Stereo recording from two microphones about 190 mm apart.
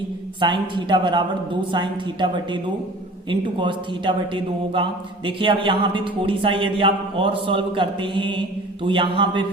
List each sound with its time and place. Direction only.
0.3 s a man's voice: 25° right (ahead or behind)